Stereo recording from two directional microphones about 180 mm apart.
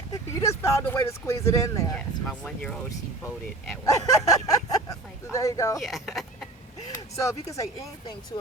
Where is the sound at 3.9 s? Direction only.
20° left (ahead or behind).